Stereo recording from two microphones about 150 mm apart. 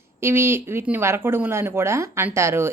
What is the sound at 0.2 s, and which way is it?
A woman's voice, 15° right (ahead or behind).